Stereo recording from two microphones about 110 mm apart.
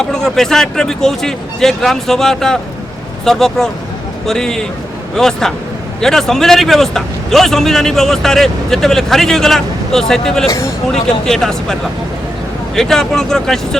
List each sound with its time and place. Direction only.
0.0 s a man's voice: 5° left (ahead or behind)